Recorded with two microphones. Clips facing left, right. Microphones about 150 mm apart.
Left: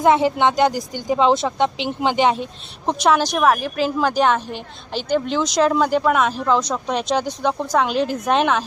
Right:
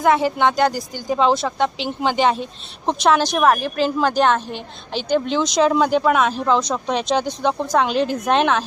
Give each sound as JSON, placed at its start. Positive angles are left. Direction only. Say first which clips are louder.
{"t": 0.0, "sound": "a woman's voice", "louder": "left 1 dB", "side_deg": 25}